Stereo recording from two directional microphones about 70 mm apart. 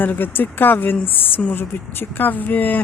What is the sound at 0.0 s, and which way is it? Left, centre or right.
Speech, left.